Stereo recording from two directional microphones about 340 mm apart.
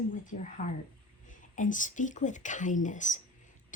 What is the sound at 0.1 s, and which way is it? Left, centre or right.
Speech, left.